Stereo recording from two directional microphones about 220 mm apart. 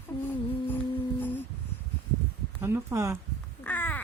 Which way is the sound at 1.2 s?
10° left (ahead or behind).